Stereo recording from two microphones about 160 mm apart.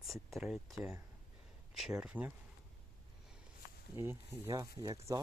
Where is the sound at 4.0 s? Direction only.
15° right (ahead or behind).